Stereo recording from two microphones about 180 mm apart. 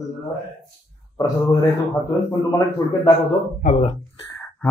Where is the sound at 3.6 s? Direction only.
35° left (ahead or behind).